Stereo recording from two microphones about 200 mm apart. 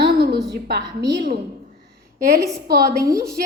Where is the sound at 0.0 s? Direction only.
55° right (ahead or behind).